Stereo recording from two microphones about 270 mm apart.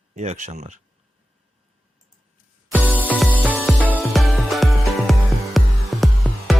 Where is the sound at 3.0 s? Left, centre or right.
Centre.